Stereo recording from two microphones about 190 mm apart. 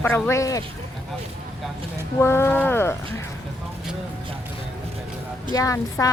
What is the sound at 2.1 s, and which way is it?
Speech, 15° left (ahead or behind).